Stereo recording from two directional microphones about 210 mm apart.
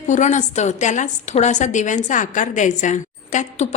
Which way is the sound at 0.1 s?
35° left (ahead or behind).